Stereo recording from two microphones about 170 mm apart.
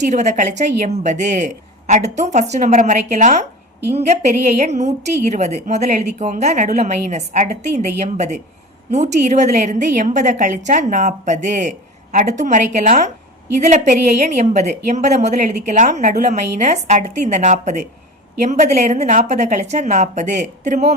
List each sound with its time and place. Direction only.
0.0 s a woman's voice: 45° right (ahead or behind)
4.5 s a woman's voice: 40° right (ahead or behind)